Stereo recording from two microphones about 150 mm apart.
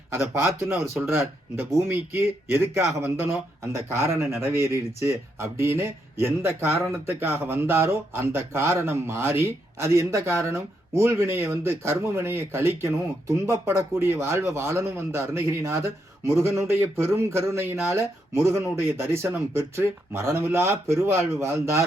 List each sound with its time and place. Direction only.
0.1 s speech: 15° right (ahead or behind)